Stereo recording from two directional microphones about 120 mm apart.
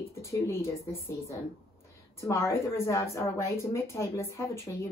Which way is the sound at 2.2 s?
25° left (ahead or behind).